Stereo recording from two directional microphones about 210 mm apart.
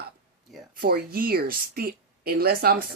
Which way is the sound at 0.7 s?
45° right (ahead or behind).